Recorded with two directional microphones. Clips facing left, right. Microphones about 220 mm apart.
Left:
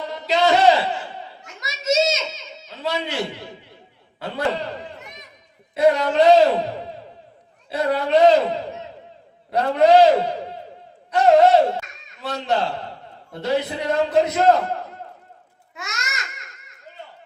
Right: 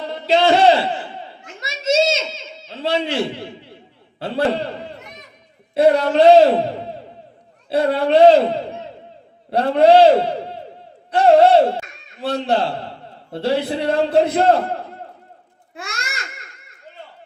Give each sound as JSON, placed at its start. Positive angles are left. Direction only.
{"t": 0.1, "sound": "a sound", "side_deg": -30}
{"t": 4.2, "sound": "a man's voice", "side_deg": -30}
{"t": 5.7, "sound": "a man's voice", "side_deg": -30}
{"t": 7.7, "sound": "a man's voice", "side_deg": -30}
{"t": 9.5, "sound": "a man's voice", "side_deg": -30}
{"t": 15.7, "sound": "babbling", "side_deg": -30}